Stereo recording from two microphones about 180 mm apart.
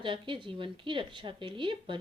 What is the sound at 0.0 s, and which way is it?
Speech, 30° right (ahead or behind).